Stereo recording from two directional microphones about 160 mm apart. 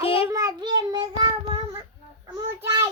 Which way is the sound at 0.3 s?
20° right (ahead or behind).